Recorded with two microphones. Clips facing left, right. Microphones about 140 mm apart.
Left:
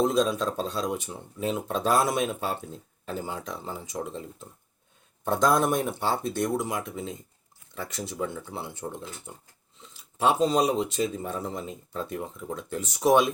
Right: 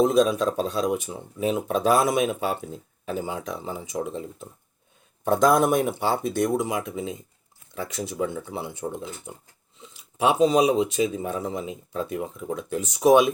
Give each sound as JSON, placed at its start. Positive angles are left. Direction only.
{"t": 0.0, "sound": "speech", "side_deg": -5}